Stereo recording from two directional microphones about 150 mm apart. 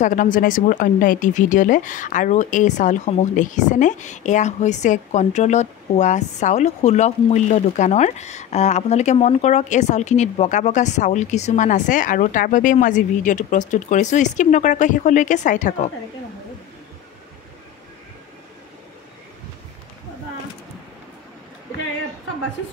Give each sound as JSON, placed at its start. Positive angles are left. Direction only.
{"t": 0.0, "sound": "speech", "side_deg": 60}